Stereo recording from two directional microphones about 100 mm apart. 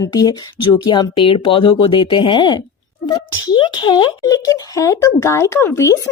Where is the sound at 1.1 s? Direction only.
70° left (ahead or behind).